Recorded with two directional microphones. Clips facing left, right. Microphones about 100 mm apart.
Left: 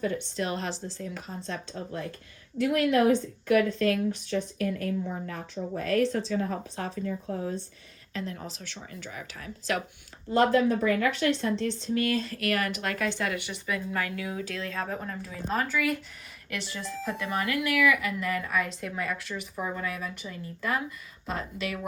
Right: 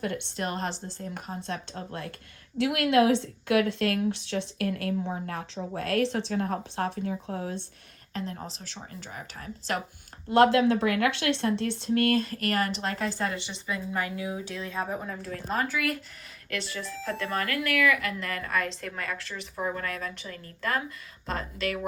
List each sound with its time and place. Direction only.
0.1 s a woman's voice: 65° right (ahead or behind)
2.6 s speech: 80° right
4.9 s a woman's voice: 60° right (ahead or behind)
8.1 s a woman's voice: 35° right (ahead or behind)
10.3 s a woman's voice: 85° right; by 14.9 s 15° right (ahead or behind)
15.0 s speech: centre (ahead or behind)
16.5 s a woman's voice: 20° left (ahead or behind)
19.3 s speech: centre (ahead or behind)
19.7 s a woman's voice: 10° left (ahead or behind)